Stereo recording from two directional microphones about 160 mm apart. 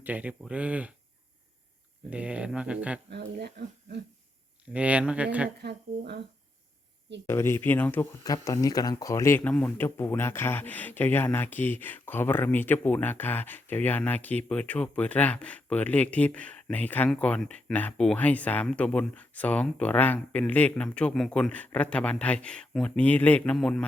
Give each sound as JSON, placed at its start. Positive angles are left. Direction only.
{"t": 0.0, "sound": "speech", "side_deg": -10}
{"t": 2.0, "sound": "speech", "side_deg": -5}
{"t": 3.4, "sound": "speech", "side_deg": -90}
{"t": 4.7, "sound": "speech", "side_deg": -10}
{"t": 5.6, "sound": "speech", "side_deg": -90}
{"t": 7.3, "sound": "speech", "side_deg": 15}
{"t": 8.2, "sound": "speech", "side_deg": 20}